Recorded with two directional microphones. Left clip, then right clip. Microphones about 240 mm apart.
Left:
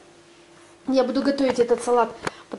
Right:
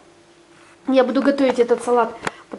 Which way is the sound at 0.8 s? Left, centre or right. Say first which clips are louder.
Right 5 dB; centre.